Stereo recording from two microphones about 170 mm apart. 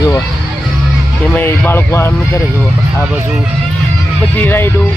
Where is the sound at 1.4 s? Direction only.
15° left (ahead or behind).